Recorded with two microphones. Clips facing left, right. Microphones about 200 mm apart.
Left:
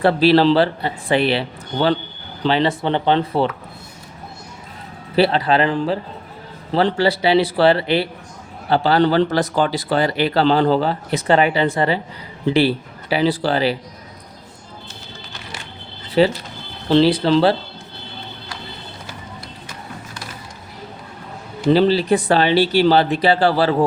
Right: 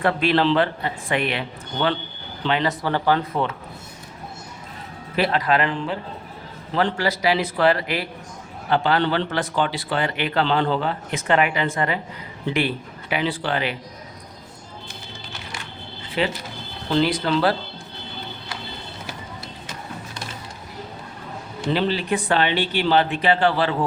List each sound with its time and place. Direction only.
0.0 s speech: 35° left (ahead or behind)
5.1 s speech: 30° left (ahead or behind)
16.2 s speech: 35° left (ahead or behind)
21.6 s speech: 35° left (ahead or behind)